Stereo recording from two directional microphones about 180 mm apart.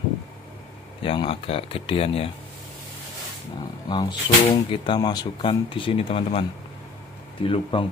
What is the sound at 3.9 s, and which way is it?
Speech, 25° left (ahead or behind).